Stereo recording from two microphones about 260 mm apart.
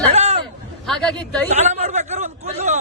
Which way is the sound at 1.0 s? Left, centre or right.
Centre.